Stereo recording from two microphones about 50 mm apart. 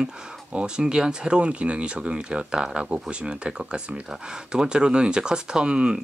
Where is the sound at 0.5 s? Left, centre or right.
Centre.